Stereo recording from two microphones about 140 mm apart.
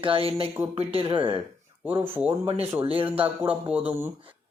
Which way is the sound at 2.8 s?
40° right (ahead or behind).